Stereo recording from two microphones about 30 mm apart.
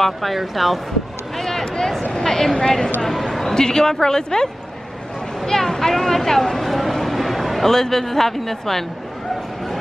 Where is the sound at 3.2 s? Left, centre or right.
Centre.